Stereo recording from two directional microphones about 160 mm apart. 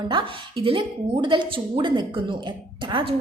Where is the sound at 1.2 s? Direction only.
30° right (ahead or behind).